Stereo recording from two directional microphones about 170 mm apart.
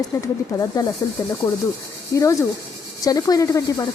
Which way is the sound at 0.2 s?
20° left (ahead or behind).